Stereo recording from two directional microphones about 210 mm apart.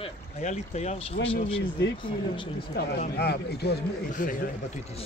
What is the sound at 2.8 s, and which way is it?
A man's voice, 50° left (ahead or behind).